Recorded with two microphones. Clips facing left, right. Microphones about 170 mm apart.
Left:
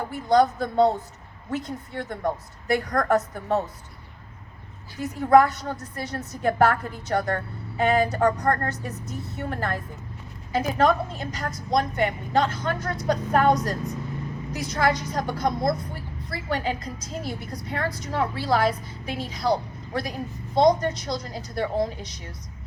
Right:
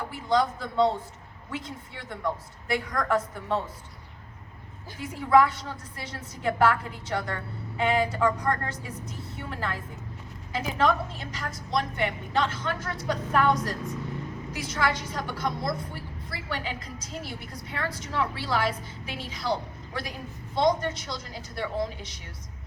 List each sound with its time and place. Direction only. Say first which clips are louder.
0.0 s a woman's voice: left 5 dB; 45° left (ahead or behind)
4.9 s a woman's voice: left 4 dB; 45° left (ahead or behind)